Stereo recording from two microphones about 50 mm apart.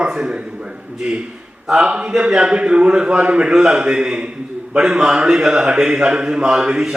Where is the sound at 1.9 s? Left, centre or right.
Right.